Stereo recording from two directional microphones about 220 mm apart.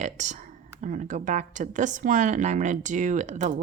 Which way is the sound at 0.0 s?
35° right (ahead or behind).